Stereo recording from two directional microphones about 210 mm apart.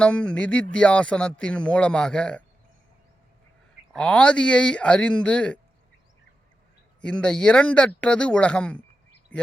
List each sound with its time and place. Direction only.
0.0 s speech: 5° left (ahead or behind)
3.9 s speech: 5° left (ahead or behind)
7.0 s speech: 5° left (ahead or behind)
9.3 s a sound: 5° left (ahead or behind)